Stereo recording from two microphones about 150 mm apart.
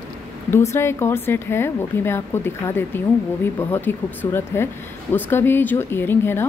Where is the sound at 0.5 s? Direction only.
15° left (ahead or behind).